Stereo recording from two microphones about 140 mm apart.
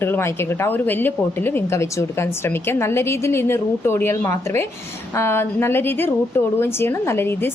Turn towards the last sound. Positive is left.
turn(degrees=15)  # may be behind; listen again after turning